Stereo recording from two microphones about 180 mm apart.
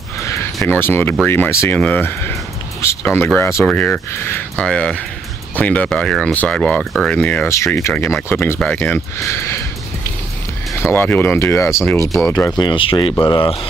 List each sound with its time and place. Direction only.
0.2 s music: 15° left (ahead or behind)
1.2 s speech: 10° left (ahead or behind)
10.8 s speech: 10° left (ahead or behind); by 13.6 s 30° left (ahead or behind)